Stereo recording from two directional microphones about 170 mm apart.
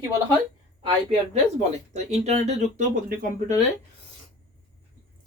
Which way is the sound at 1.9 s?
40° right (ahead or behind).